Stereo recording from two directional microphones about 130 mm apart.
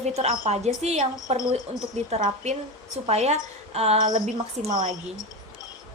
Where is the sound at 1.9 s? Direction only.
65° right (ahead or behind).